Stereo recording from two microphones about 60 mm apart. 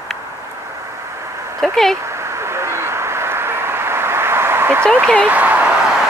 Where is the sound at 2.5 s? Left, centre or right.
Right.